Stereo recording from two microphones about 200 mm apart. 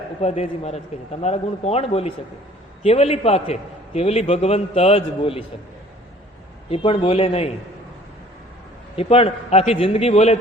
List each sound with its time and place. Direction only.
0.2 s a man's voice: 35° left (ahead or behind)
6.7 s a man's voice: 30° left (ahead or behind)
9.0 s a man's voice: 30° left (ahead or behind)